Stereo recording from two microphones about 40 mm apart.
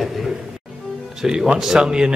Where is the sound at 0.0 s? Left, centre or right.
Centre.